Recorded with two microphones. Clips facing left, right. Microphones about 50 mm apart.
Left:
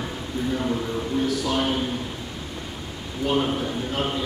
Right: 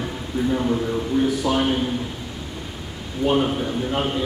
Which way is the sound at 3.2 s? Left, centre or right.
Centre.